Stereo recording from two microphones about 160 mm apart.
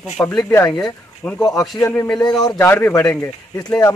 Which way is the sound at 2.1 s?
5° left (ahead or behind).